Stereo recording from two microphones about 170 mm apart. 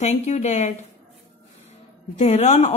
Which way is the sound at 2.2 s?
45° left (ahead or behind).